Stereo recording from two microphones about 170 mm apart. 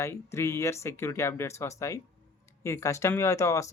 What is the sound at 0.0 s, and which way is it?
Speech, 15° left (ahead or behind).